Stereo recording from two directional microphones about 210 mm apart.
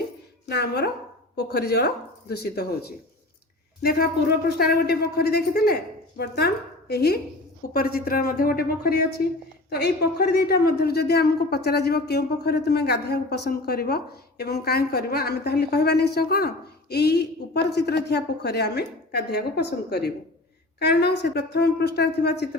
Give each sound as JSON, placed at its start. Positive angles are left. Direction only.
{"t": 0.4, "sound": "a woman's voice", "side_deg": 50}
{"t": 3.8, "sound": "a woman's voice", "side_deg": 50}